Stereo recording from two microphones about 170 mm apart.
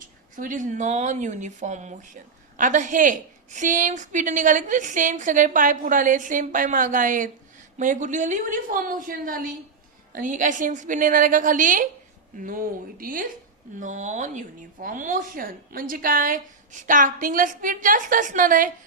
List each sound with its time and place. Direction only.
0.0 s a woman's voice: 50° right (ahead or behind)